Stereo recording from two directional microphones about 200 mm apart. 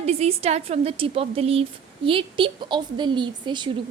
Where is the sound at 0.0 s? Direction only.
30° right (ahead or behind).